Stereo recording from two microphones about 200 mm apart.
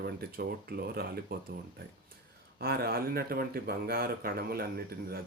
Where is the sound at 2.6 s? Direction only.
50° right (ahead or behind).